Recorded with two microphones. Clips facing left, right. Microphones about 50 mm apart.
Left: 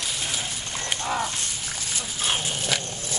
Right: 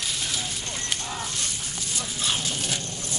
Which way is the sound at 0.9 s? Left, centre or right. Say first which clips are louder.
Left 7 dB; left.